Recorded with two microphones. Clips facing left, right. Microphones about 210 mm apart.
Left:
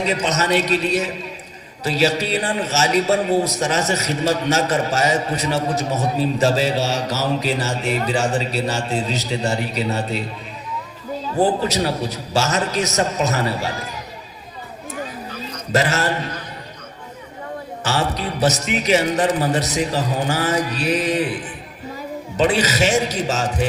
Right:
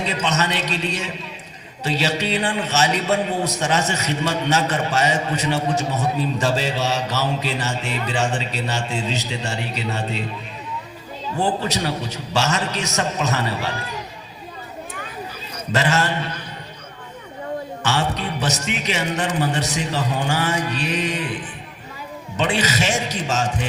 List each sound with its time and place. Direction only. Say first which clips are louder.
0.0 s a man's voice: left 2 dB; 40° left (ahead or behind)
11.3 s a man's voice: left 4 dB; 40° left (ahead or behind)
15.7 s a man's voice: left 1 dB; 40° left (ahead or behind)
17.8 s a man's voice: left 1 dB; 40° left (ahead or behind)
22.4 s a man's voice: left 4 dB; 40° left (ahead or behind)